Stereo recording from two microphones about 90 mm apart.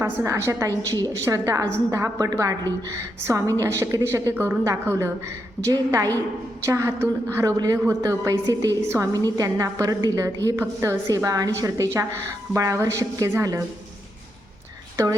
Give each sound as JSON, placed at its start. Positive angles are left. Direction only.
{"t": 0.0, "sound": "a woman's voice", "side_deg": -30}
{"t": 7.5, "sound": "a woman's voice", "side_deg": -45}